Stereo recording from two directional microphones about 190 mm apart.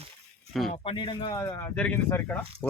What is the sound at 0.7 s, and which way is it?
Speech, 30° left (ahead or behind).